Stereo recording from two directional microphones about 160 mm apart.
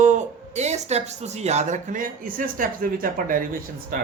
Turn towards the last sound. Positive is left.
turn(degrees=-60)  # may be behind; listen again after turning